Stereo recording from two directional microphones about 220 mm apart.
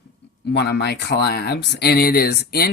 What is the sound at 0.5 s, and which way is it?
Speech, 50° left (ahead or behind).